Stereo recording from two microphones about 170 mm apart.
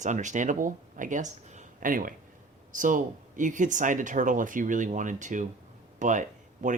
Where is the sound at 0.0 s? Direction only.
45° right (ahead or behind).